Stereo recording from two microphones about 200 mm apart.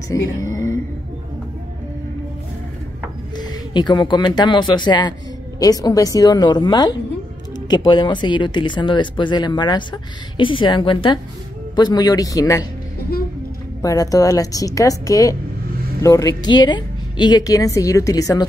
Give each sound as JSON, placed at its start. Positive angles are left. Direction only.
{"t": 0.4, "sound": "a sound", "side_deg": 15}
{"t": 3.3, "sound": "speech", "side_deg": 20}
{"t": 13.8, "sound": "a woman's voice", "side_deg": 15}